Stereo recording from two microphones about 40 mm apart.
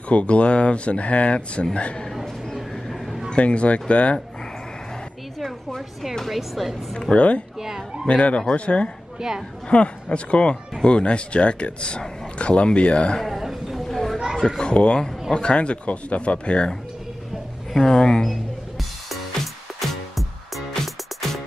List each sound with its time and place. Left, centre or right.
0.1 s speech: left
3.3 s speech: left
6.2 s a woman's voice: centre
6.9 s speech: centre
7.2 s speech: left
7.6 s speech: centre
8.1 s a man's voice: left
13.4 s a sound: centre
13.8 s children playing: centre
14.6 s a man's voice: left
17.7 s speech: centre
18.3 s music: centre